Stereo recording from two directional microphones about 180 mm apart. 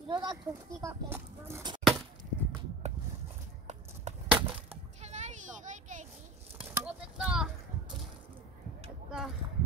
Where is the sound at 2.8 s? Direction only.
40° right (ahead or behind).